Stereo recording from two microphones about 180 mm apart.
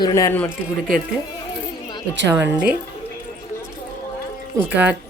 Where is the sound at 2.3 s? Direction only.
15° right (ahead or behind).